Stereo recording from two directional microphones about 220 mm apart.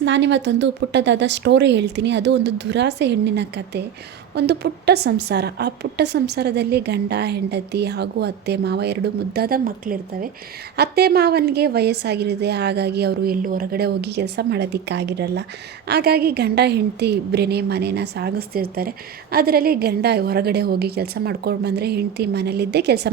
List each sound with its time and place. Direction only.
0.0 s a woman's voice: 55° right (ahead or behind)